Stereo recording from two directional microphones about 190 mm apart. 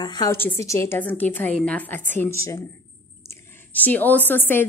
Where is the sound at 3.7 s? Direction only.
10° left (ahead or behind).